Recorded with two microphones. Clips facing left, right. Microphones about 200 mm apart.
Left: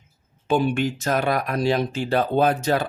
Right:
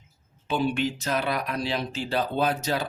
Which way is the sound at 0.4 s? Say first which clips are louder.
Left 5 dB; 50° left (ahead or behind).